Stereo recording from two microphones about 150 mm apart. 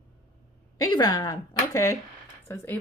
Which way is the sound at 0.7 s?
25° left (ahead or behind).